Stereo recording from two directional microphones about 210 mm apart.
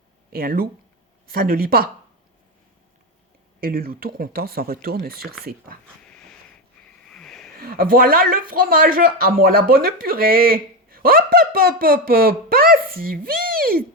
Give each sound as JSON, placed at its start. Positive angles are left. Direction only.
{"t": 0.3, "sound": "speech", "side_deg": -45}
{"t": 3.6, "sound": "speech", "side_deg": -45}
{"t": 6.1, "sound": "a sound", "side_deg": 5}
{"t": 7.6, "sound": "speech", "side_deg": -45}